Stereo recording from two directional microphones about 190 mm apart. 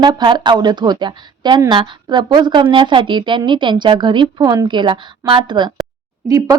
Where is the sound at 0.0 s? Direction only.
25° right (ahead or behind).